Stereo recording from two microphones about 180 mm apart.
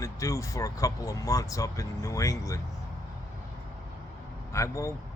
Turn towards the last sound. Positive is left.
turn(degrees=15)  # may be behind; listen again after turning